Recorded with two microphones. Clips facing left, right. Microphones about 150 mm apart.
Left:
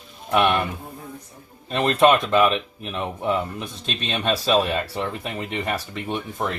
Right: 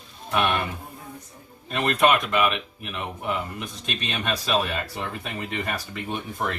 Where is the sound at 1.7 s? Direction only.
30° left (ahead or behind).